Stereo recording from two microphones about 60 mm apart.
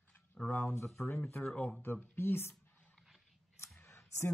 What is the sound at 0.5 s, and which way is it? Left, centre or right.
Speech, left.